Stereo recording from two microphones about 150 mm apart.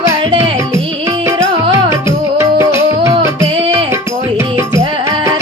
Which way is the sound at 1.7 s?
20° right (ahead or behind).